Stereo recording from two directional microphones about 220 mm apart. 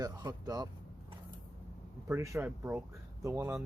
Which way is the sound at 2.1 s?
10° right (ahead or behind).